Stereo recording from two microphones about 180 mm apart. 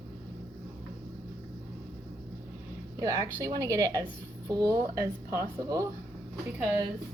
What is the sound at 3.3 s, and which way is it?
Speech, 20° right (ahead or behind).